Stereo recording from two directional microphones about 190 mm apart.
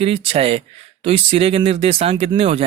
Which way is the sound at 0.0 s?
30° right (ahead or behind).